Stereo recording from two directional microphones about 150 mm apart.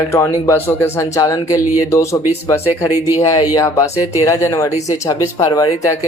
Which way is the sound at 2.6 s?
15° right (ahead or behind).